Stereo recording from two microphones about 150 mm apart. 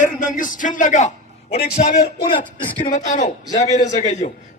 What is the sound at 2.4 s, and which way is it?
A man's voice, 60° left (ahead or behind).